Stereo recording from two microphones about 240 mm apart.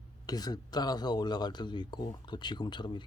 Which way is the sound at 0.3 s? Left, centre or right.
Centre.